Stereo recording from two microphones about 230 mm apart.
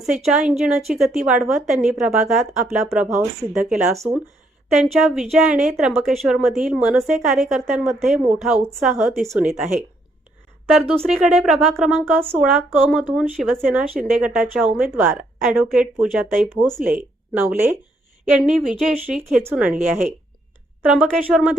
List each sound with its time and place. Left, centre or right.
0.0 s a woman's voice: centre
10.7 s a woman's voice: centre
20.8 s a woman's voice: centre